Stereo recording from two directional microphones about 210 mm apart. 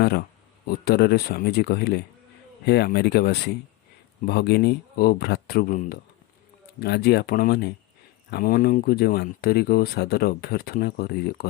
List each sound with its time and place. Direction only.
0.0 s speech: 50° left (ahead or behind)